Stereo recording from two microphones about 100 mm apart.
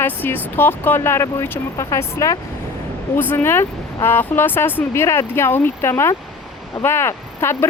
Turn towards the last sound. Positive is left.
turn(degrees=25)  # may be behind; listen again after turning